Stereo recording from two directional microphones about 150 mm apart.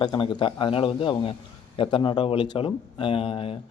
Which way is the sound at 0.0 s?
30° left (ahead or behind).